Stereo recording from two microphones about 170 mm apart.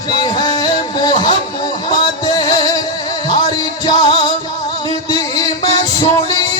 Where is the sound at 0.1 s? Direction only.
25° left (ahead or behind).